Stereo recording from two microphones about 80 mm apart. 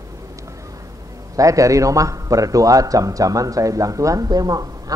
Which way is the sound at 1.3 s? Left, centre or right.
Right.